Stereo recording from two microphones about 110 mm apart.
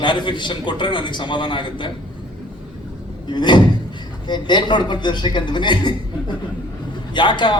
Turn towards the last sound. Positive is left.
turn(degrees=45)  # may be behind; listen again after turning